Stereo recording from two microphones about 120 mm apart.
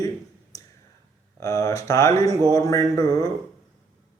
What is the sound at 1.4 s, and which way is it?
Speech, 30° left (ahead or behind).